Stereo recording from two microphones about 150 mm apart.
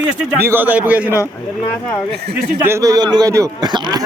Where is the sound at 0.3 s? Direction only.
15° right (ahead or behind).